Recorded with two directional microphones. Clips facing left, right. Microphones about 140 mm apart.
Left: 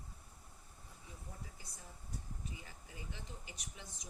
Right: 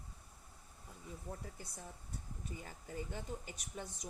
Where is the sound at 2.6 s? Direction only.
45° right (ahead or behind).